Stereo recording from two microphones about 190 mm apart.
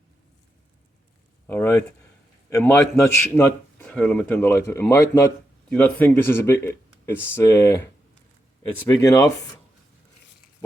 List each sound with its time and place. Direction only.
1.5 s a man's voice: 10° left (ahead or behind)
8.9 s speech: 20° left (ahead or behind)